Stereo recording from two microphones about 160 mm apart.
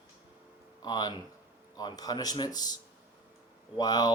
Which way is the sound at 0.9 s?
25° left (ahead or behind).